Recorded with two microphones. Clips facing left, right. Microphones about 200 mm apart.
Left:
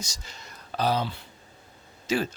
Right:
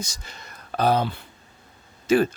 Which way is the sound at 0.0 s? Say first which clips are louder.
Right 4 dB; 55° right (ahead or behind).